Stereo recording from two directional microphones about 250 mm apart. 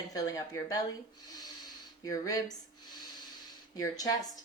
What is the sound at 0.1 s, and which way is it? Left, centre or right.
Speech, centre.